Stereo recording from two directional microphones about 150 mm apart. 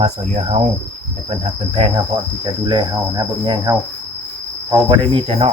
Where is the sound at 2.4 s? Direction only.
30° right (ahead or behind).